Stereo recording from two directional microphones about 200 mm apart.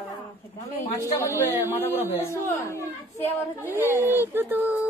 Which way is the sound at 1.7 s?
10° left (ahead or behind).